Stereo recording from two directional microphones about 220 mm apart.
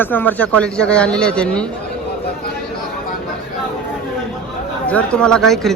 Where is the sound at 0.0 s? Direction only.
10° left (ahead or behind).